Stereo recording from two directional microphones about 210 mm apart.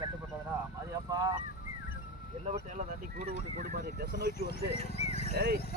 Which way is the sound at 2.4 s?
35° right (ahead or behind).